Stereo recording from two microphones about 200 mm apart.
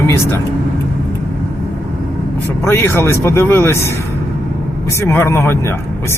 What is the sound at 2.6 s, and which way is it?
Speech, 10° left (ahead or behind).